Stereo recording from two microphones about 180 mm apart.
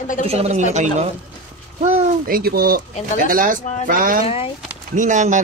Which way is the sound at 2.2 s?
55° right (ahead or behind).